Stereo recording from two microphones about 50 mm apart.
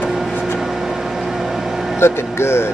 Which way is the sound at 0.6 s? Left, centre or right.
Centre.